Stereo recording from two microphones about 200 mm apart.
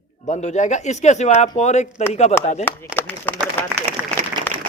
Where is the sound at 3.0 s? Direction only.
10° left (ahead or behind).